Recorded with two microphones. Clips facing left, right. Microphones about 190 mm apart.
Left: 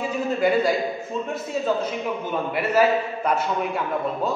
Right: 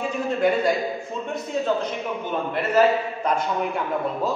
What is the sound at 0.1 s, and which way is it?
A man's voice, 5° left (ahead or behind).